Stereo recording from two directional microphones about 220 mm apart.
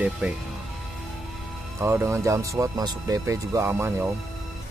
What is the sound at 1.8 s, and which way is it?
Speech, 10° right (ahead or behind).